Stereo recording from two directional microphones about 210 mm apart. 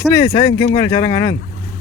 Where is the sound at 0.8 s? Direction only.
15° left (ahead or behind).